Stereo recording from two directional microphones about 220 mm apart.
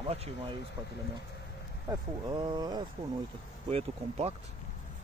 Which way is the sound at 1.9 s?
20° right (ahead or behind).